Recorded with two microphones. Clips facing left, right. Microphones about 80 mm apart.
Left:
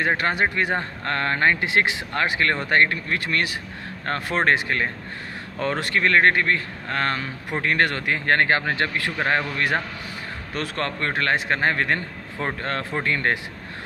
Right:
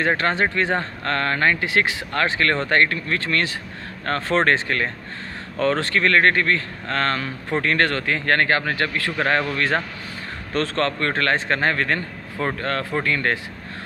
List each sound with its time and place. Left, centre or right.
0.1 s a man's voice: centre
10.5 s a man's voice: centre